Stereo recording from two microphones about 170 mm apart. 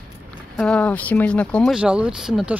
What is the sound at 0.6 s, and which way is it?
Speech, 5° left (ahead or behind).